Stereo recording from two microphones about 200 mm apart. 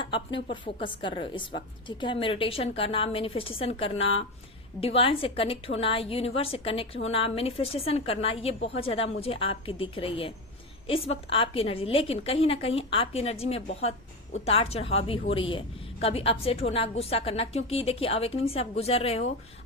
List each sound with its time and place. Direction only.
0.0 s a woman's voice: 25° left (ahead or behind)